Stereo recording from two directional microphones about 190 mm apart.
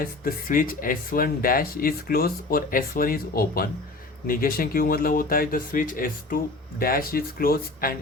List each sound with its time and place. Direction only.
0.0 s speech: 50° left (ahead or behind)